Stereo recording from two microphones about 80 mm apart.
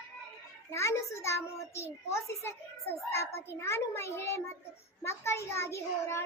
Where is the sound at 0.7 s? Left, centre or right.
Left.